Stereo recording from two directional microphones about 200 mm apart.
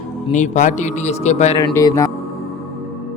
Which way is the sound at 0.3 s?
35° left (ahead or behind).